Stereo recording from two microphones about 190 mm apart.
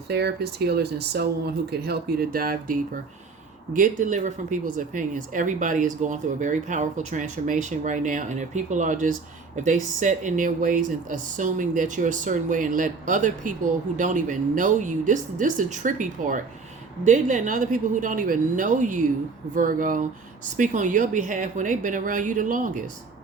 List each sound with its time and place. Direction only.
0.1 s speech: 60° right (ahead or behind); by 22.8 s 45° right (ahead or behind)